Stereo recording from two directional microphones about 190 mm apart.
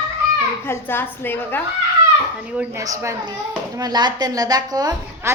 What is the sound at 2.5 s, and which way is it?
Speech, 5° right (ahead or behind).